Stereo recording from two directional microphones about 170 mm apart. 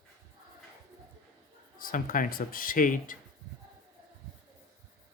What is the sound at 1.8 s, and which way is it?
Speech, 55° left (ahead or behind).